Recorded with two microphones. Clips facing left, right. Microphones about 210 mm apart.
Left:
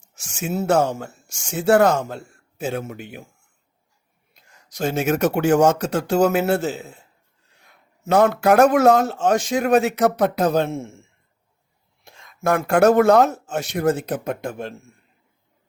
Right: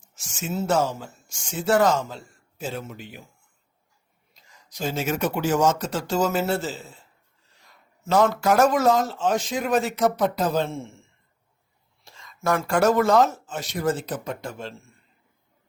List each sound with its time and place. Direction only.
0.1 s speech: 65° left (ahead or behind)
2.6 s speech: 55° left (ahead or behind)
4.4 s speech: 60° left (ahead or behind)
12.0 s speech: 55° left (ahead or behind)